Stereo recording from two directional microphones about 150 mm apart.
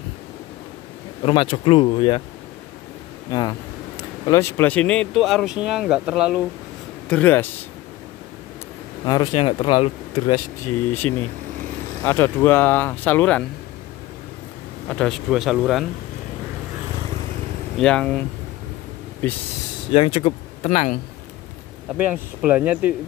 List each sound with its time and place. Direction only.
1.2 s speech: 35° left (ahead or behind)
3.3 s speech: 25° left (ahead or behind)
4.3 s speech: 15° left (ahead or behind); by 6.4 s 5° right (ahead or behind)
7.1 s speech: 10° left (ahead or behind)
9.0 s speech: 25° left (ahead or behind)
10.9 s speech: 15° left (ahead or behind)
14.9 s speech: 5° left (ahead or behind)
17.7 s speech: 5° left (ahead or behind)
19.9 s speech: 40° left (ahead or behind)
21.9 s speech: 10° right (ahead or behind)